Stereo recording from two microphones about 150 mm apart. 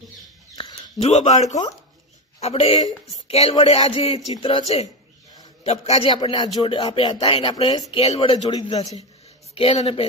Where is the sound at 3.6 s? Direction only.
40° left (ahead or behind).